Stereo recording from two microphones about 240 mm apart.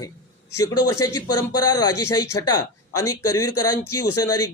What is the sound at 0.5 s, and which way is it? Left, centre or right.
Speech, centre.